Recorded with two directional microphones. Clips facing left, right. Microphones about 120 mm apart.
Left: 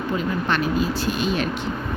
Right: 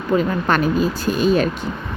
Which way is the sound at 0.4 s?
45° right (ahead or behind).